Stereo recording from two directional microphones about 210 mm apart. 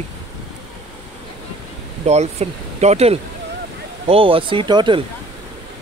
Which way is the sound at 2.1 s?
30° right (ahead or behind).